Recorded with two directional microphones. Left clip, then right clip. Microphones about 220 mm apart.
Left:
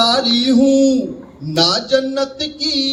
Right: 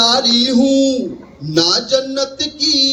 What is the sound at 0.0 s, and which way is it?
Music, 15° right (ahead or behind).